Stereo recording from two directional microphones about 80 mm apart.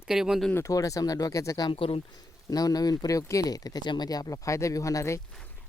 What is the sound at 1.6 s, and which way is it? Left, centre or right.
Speech, left.